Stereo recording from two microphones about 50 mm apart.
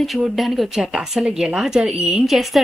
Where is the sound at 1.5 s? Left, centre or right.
Centre.